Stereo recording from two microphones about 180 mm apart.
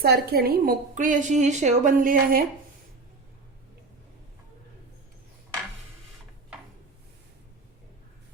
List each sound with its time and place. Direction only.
0.0 s a woman's voice: 60° right (ahead or behind)